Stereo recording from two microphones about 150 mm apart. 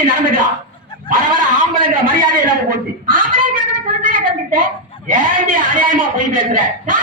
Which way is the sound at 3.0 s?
65° right (ahead or behind).